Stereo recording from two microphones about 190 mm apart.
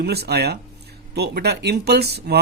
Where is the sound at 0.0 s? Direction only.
60° right (ahead or behind).